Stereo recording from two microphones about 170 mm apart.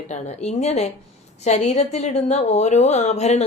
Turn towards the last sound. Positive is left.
turn(degrees=40)  # may be behind; listen again after turning